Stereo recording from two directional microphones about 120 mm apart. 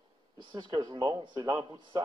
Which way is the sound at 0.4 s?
40° right (ahead or behind).